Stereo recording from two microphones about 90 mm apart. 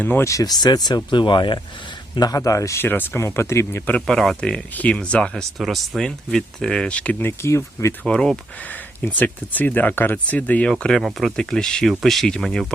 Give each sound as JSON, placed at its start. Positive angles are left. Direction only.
{"t": 0.0, "sound": "speech", "side_deg": 20}
{"t": 0.3, "sound": "speech", "side_deg": 45}
{"t": 2.1, "sound": "a man's voice", "side_deg": 45}
{"t": 2.8, "sound": "speech", "side_deg": 20}
{"t": 4.0, "sound": "speech", "side_deg": 0}
{"t": 8.0, "sound": "speech", "side_deg": 10}
{"t": 10.7, "sound": "speech", "side_deg": 5}